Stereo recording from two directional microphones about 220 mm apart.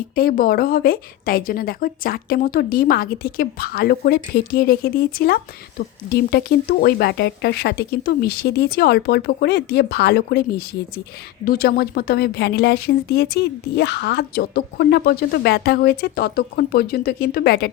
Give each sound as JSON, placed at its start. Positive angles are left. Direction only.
{"t": 0.2, "sound": "a woman's voice", "side_deg": 40}